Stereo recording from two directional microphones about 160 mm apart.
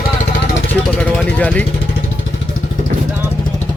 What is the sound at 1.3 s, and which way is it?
Speech, 10° left (ahead or behind).